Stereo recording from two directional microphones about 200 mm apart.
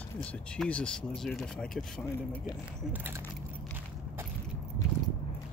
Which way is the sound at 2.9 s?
10° right (ahead or behind).